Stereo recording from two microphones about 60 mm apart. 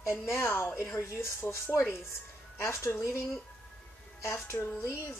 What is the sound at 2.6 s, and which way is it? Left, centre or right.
Speech, left.